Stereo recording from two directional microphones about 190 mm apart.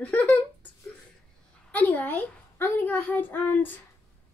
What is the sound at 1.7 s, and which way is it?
A child's voice, 10° left (ahead or behind).